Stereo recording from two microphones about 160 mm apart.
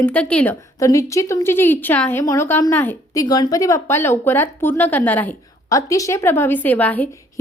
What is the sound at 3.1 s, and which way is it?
Speech, 25° left (ahead or behind).